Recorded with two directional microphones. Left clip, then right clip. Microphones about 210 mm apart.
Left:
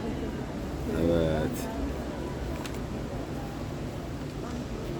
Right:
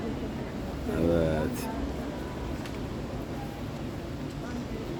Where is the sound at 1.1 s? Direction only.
5° right (ahead or behind).